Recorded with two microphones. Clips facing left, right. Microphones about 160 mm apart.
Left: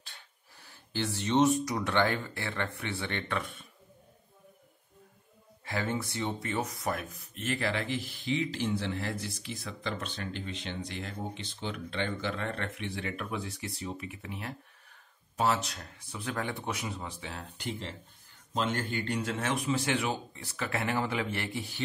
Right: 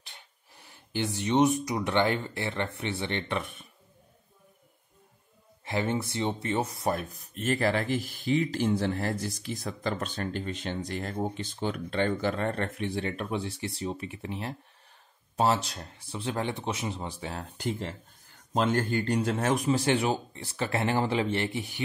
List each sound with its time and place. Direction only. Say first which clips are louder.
0.0 s speech: right 2 dB; 20° right (ahead or behind)
5.7 s speech: right 4 dB; 20° right (ahead or behind)